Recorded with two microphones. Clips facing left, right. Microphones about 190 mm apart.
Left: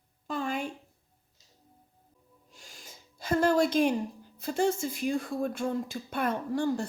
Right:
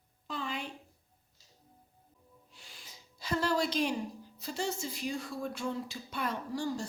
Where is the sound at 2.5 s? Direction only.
45° left (ahead or behind).